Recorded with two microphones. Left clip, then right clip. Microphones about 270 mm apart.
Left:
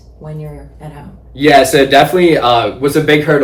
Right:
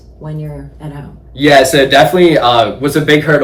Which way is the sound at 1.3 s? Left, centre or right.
Centre.